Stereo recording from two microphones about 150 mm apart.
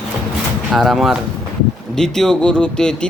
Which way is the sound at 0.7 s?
Centre (ahead or behind).